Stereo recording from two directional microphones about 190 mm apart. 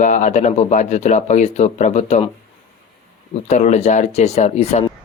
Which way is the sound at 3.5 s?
40° left (ahead or behind).